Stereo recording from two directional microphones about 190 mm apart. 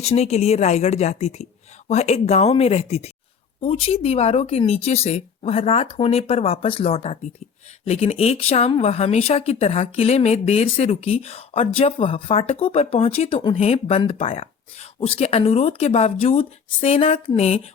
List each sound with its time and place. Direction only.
0.0 s speech: 35° left (ahead or behind)